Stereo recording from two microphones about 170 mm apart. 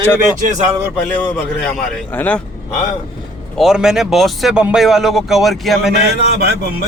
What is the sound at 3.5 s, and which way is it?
Speech, 5° right (ahead or behind).